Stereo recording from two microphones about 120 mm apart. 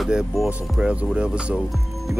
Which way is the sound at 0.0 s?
5° right (ahead or behind).